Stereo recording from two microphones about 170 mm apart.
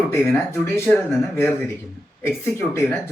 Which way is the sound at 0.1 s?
15° left (ahead or behind).